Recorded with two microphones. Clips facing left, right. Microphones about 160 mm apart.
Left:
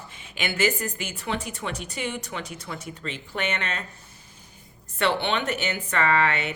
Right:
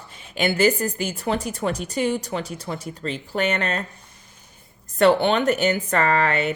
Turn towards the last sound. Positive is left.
turn(degrees=-40)  # may be behind; listen again after turning